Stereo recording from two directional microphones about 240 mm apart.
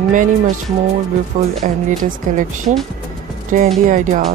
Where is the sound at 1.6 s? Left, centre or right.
Right.